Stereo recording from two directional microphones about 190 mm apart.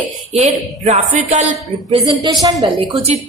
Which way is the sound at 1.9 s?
25° right (ahead or behind).